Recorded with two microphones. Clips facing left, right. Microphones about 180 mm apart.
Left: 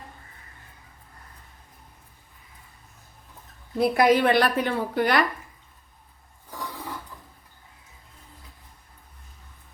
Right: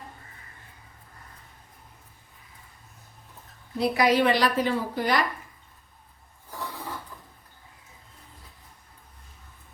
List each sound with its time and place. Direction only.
3.8 s a woman's voice: 50° left (ahead or behind)